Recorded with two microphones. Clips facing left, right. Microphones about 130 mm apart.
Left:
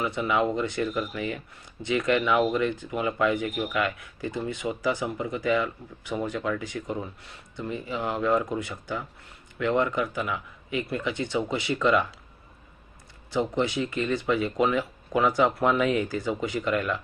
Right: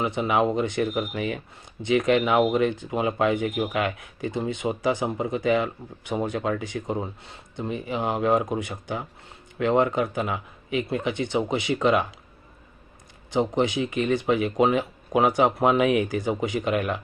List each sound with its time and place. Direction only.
0.0 s speech: 25° right (ahead or behind)
13.3 s speech: 25° right (ahead or behind)